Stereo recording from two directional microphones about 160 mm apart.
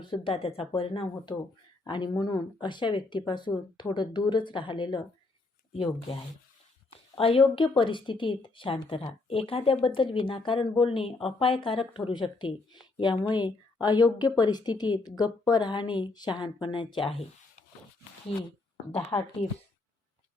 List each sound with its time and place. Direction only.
0.0 s speech: 30° left (ahead or behind)
18.3 s speech: 35° left (ahead or behind)
19.1 s speech: 20° left (ahead or behind)